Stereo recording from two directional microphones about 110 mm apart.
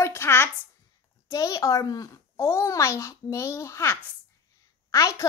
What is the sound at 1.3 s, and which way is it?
A woman's voice, 30° left (ahead or behind).